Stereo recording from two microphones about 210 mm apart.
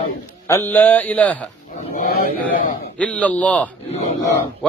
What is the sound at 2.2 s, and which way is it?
Speech, 40° left (ahead or behind).